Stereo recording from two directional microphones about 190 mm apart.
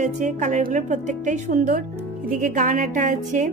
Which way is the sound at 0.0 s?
40° right (ahead or behind).